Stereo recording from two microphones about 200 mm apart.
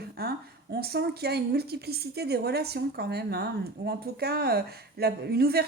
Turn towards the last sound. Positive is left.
turn(degrees=-50)  # may be behind; listen again after turning